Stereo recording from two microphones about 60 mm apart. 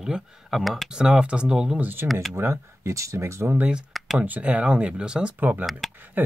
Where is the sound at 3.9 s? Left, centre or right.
Centre.